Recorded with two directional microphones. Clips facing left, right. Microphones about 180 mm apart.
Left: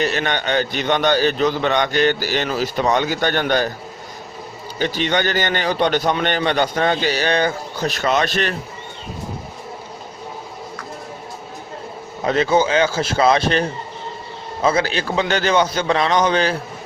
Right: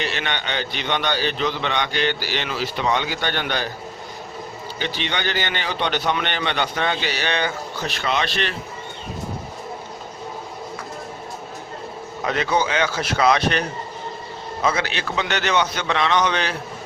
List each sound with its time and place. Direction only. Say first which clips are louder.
0.0 s a man's voice: left 6 dB; 45° left (ahead or behind)
4.8 s a man's voice: left 7 dB; 45° left (ahead or behind)
12.2 s a man's voice: left 5 dB; 30° left (ahead or behind)